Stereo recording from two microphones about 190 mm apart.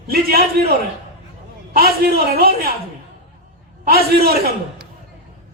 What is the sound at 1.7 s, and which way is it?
Speech, 55° right (ahead or behind).